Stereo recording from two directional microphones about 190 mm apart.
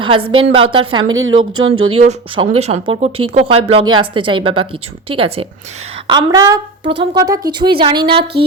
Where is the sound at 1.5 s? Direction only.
90° right.